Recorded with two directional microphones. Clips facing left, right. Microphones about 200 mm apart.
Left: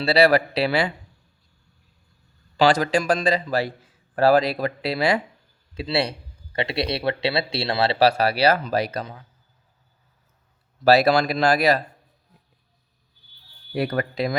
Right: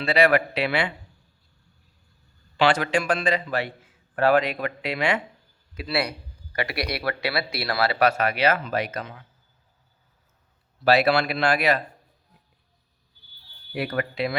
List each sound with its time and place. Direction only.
0.0 s a man's voice: 35° left (ahead or behind)
2.6 s a man's voice: 40° left (ahead or behind)
10.8 s a man's voice: 40° left (ahead or behind)
13.7 s a man's voice: 40° left (ahead or behind)